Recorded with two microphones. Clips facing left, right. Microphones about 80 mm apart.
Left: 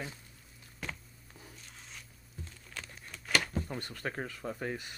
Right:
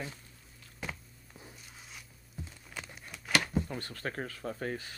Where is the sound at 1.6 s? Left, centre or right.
Centre.